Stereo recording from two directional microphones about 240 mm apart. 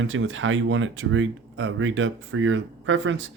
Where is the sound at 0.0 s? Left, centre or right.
Right.